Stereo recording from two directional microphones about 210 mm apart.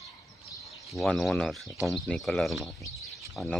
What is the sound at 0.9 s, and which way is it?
Speech, centre (ahead or behind).